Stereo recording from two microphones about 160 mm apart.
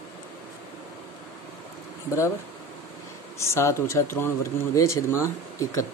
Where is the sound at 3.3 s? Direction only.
15° left (ahead or behind).